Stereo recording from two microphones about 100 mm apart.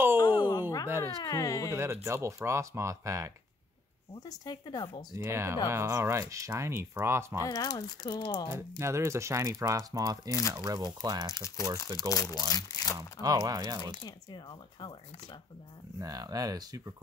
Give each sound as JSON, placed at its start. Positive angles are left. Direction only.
{"t": 0.2, "sound": "a sound", "side_deg": 45}
{"t": 1.2, "sound": "speech", "side_deg": 35}
{"t": 2.0, "sound": "speech", "side_deg": -25}
{"t": 4.3, "sound": "speech", "side_deg": 45}
{"t": 5.1, "sound": "speech", "side_deg": -25}
{"t": 7.4, "sound": "speech", "side_deg": 40}
{"t": 8.5, "sound": "speech", "side_deg": -30}
{"t": 11.3, "sound": "speech", "side_deg": 30}
{"t": 13.2, "sound": "speech", "side_deg": -40}
{"t": 14.0, "sound": "speech", "side_deg": 50}
{"t": 16.0, "sound": "speech", "side_deg": -40}